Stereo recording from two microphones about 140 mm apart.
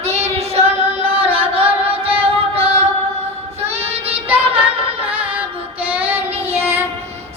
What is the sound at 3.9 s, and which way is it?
Child singing, 45° right (ahead or behind).